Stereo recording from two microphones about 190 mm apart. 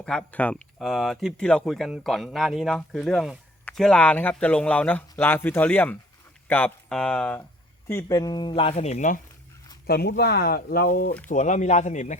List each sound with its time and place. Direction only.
0.0 s speech: 5° left (ahead or behind)
7.9 s speech: 15° left (ahead or behind); by 9.2 s 40° left (ahead or behind)
9.8 s speech: 55° left (ahead or behind)
11.3 s speech: 40° left (ahead or behind)